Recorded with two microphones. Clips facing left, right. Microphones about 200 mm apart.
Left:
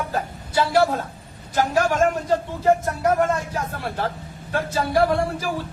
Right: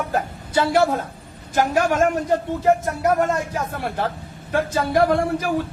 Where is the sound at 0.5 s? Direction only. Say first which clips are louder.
Right 1 dB; 20° right (ahead or behind).